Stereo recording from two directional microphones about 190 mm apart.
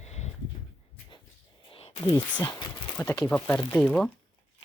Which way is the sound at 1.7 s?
30° left (ahead or behind).